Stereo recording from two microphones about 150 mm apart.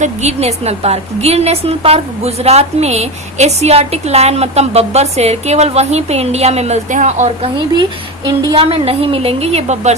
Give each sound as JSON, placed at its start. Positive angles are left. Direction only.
{"t": 0.0, "sound": "a woman's voice", "side_deg": -50}
{"t": 8.5, "sound": "a woman's voice", "side_deg": -40}